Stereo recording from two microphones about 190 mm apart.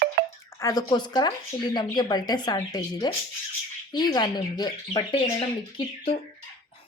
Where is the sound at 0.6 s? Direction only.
20° left (ahead or behind).